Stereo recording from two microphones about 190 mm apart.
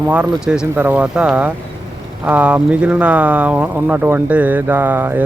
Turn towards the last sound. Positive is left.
turn(degrees=-10)  # may be behind; listen again after turning